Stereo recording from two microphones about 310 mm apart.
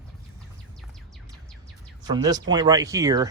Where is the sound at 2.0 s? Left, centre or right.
Centre.